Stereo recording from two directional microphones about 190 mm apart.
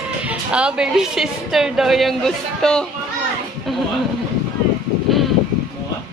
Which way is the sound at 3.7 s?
Centre (ahead or behind).